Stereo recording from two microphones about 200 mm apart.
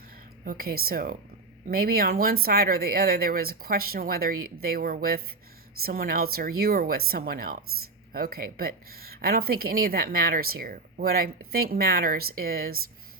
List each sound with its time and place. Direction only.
0.4 s speech: 50° right (ahead or behind)